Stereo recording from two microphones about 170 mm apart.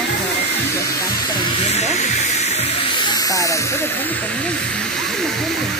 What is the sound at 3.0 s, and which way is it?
Speech, 20° left (ahead or behind).